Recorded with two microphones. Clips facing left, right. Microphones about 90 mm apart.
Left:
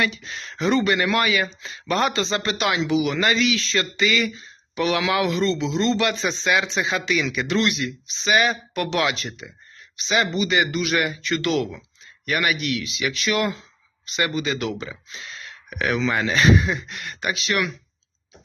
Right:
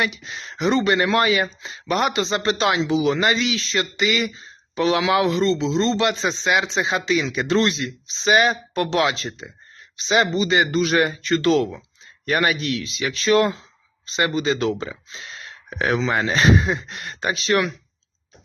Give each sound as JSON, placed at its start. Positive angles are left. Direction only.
{"t": 0.0, "sound": "a man's voice", "side_deg": -20}